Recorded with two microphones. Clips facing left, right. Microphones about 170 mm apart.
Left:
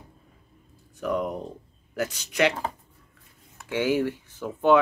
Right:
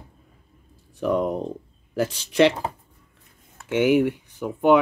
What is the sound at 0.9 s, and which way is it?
Speech, 30° right (ahead or behind).